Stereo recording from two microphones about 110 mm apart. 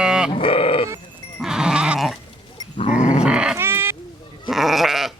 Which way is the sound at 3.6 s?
20° right (ahead or behind).